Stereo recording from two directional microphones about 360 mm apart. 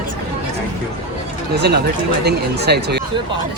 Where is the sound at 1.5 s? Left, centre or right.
Right.